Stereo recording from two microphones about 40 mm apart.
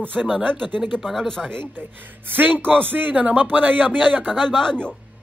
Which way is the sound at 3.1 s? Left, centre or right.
Right.